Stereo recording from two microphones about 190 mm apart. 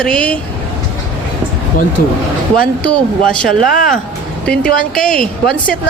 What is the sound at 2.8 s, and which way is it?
Speech, 5° left (ahead or behind).